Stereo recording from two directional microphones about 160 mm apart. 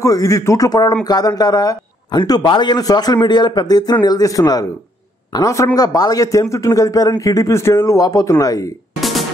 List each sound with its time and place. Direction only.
0.0 s a man's voice: 20° left (ahead or behind)